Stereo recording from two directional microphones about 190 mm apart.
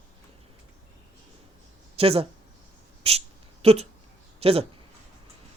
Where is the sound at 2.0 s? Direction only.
30° right (ahead or behind).